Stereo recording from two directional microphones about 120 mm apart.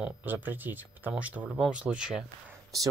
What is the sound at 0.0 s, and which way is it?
Speech, 15° right (ahead or behind).